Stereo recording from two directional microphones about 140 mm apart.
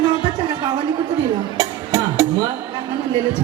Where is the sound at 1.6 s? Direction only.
25° right (ahead or behind).